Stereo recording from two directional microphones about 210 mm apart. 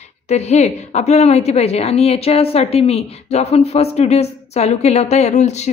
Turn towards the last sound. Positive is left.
turn(degrees=30)  # may be behind; listen again after turning